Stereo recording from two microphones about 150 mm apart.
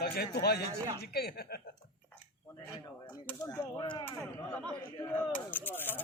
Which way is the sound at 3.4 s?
25° left (ahead or behind).